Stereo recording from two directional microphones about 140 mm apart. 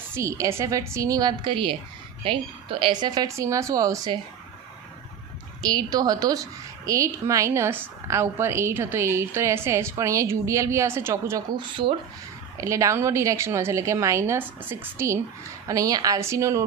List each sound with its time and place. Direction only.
0.1 s a woman's voice: 20° right (ahead or behind)
5.6 s a woman's voice: 30° right (ahead or behind)
11.5 s speech: 35° right (ahead or behind)
12.5 s a woman's voice: 20° right (ahead or behind)